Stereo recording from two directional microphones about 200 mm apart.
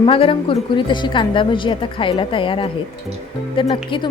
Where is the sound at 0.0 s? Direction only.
25° left (ahead or behind).